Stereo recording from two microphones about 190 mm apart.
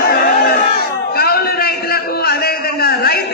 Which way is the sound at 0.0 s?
55° left (ahead or behind).